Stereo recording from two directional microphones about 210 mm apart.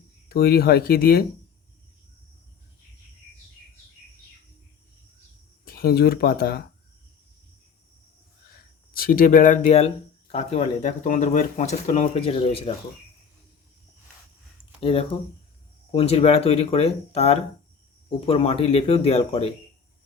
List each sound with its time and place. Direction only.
0.3 s speech: 45° left (ahead or behind)
5.6 s speech: 45° left (ahead or behind)
8.9 s speech: 45° left (ahead or behind); by 12.7 s 25° left (ahead or behind)
14.8 s speech: 25° left (ahead or behind)